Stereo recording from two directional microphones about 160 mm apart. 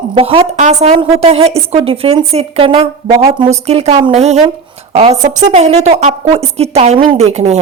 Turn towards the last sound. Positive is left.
turn(degrees=-45)  # may be behind; listen again after turning